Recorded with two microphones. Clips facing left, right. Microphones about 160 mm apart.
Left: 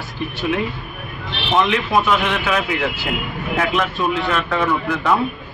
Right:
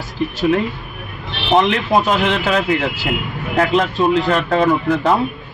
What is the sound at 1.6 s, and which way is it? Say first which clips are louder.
Speech: even; 40° right (ahead or behind).